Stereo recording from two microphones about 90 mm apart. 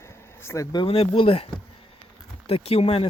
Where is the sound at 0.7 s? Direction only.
80° left.